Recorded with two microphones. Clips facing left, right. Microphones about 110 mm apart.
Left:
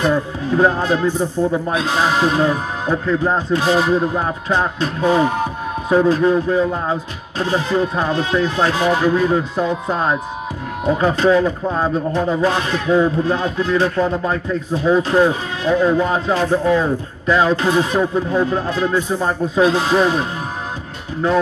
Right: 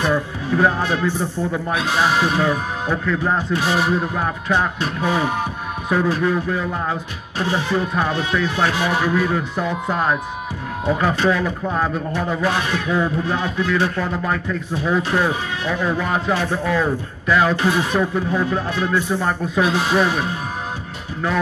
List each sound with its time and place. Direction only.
0.1 s a man's voice: 20° left (ahead or behind)